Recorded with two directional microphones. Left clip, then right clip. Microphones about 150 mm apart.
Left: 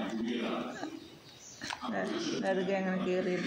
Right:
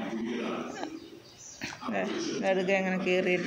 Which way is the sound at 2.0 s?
20° right (ahead or behind).